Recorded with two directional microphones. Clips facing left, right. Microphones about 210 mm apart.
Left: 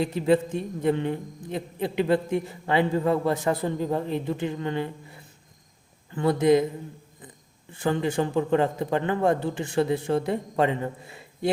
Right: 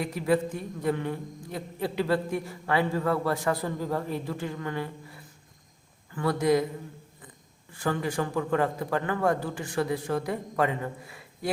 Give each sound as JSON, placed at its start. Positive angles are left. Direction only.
{"t": 0.0, "sound": "a man's voice", "side_deg": 25}
{"t": 7.7, "sound": "a man's voice", "side_deg": 20}